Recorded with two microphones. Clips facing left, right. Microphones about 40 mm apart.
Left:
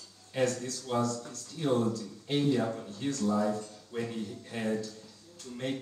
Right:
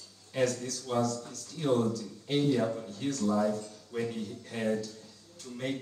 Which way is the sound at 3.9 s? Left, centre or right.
Centre.